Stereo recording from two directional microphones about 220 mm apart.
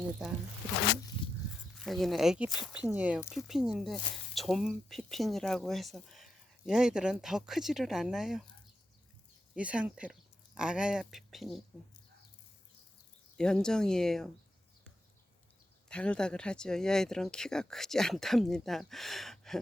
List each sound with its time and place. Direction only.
1.8 s speech: centre (ahead or behind)
9.6 s speech: 5° right (ahead or behind)
13.3 s speech: 5° left (ahead or behind)
15.9 s speech: 5° left (ahead or behind)